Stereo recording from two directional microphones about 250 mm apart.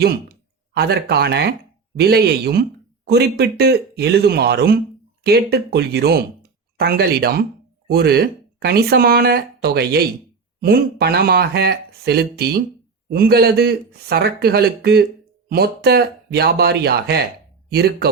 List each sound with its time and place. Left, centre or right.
0.7 s speech: right